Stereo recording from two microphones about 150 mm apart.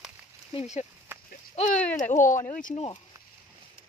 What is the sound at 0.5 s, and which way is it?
Speech, 50° left (ahead or behind).